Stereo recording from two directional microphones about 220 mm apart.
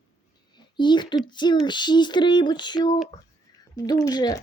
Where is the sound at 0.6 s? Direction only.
20° left (ahead or behind).